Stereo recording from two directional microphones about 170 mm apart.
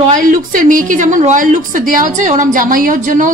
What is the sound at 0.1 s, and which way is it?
A woman's voice, 50° right (ahead or behind).